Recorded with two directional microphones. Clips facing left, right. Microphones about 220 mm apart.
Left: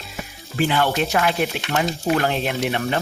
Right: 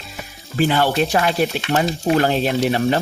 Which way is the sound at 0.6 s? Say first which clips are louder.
Right 3 dB; 40° right (ahead or behind).